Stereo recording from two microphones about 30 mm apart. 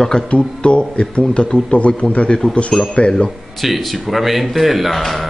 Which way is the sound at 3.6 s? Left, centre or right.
Centre.